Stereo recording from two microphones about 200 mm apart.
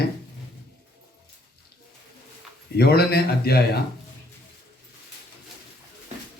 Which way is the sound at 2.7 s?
50° left (ahead or behind).